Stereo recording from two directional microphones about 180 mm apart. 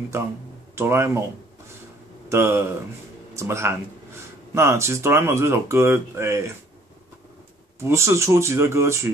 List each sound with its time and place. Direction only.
0.1 s speech: 15° right (ahead or behind)
2.2 s speech: 15° right (ahead or behind)
7.9 s speech: 15° right (ahead or behind)